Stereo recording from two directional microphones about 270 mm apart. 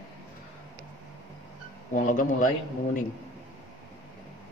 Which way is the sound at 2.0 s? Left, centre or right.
Left.